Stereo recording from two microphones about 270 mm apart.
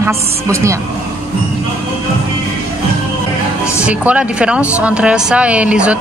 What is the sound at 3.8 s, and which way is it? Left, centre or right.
Speech, centre.